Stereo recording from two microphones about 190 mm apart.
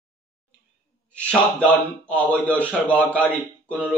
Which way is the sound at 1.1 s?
5° left (ahead or behind).